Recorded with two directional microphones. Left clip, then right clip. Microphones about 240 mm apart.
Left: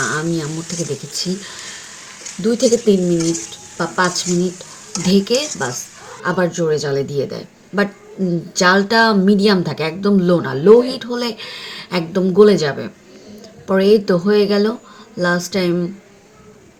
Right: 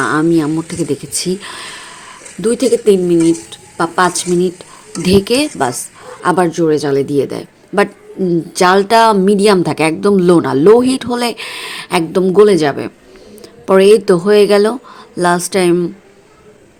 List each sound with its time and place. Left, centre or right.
0.0 s a woman's voice: right